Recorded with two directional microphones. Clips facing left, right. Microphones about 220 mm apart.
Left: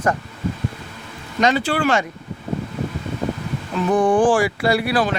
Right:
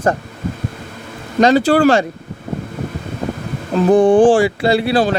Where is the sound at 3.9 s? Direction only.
25° right (ahead or behind).